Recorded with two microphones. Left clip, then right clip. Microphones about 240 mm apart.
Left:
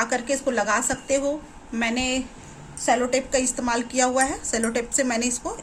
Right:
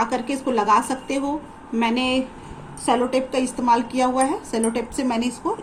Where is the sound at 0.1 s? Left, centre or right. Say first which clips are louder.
Even; left.